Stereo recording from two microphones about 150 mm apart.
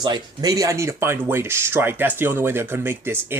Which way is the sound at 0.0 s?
25° right (ahead or behind).